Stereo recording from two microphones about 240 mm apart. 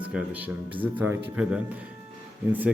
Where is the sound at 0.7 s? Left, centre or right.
Centre.